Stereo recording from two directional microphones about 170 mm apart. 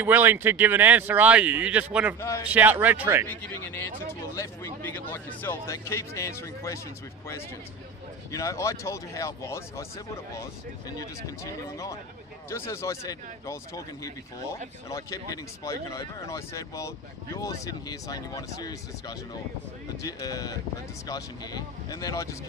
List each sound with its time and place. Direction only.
0.0 s speech: 10° right (ahead or behind)
2.1 s speech: 20° left (ahead or behind)
2.4 s speech: 10° right (ahead or behind)
4.4 s speech: 10° left (ahead or behind)
8.3 s speech: 15° left (ahead or behind)